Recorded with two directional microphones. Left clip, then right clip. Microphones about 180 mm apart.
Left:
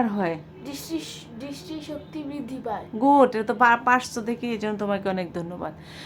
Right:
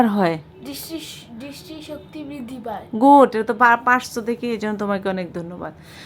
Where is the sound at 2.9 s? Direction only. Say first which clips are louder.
Right 6 dB; 30° right (ahead or behind); by 5.7 s 10° right (ahead or behind).